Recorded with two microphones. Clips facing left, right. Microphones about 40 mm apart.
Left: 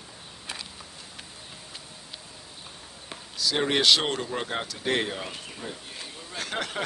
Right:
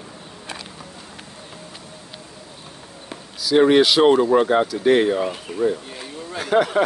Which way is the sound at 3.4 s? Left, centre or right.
Centre.